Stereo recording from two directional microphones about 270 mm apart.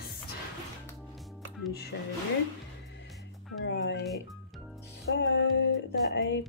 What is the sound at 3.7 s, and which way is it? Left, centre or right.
Speech, left.